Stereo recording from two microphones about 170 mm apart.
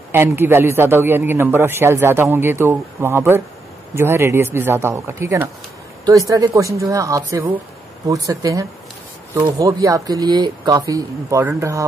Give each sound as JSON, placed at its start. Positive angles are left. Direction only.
{"t": 0.1, "sound": "a man's voice", "side_deg": -15}